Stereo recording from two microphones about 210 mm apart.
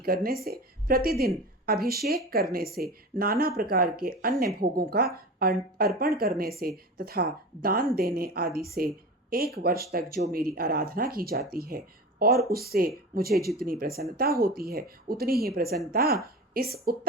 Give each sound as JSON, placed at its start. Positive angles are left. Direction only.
{"t": 0.0, "sound": "a woman's voice", "side_deg": -45}